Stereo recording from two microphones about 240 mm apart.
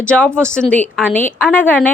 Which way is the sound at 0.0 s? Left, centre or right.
Centre.